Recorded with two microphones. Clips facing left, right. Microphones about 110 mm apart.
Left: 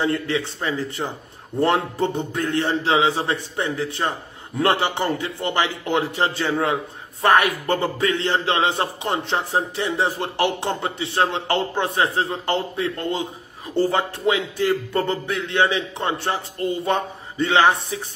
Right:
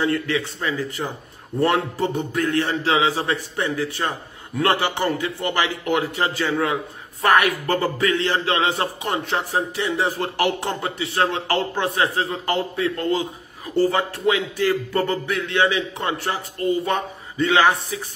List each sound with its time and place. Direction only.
0.0 s a man's voice: 25° left (ahead or behind)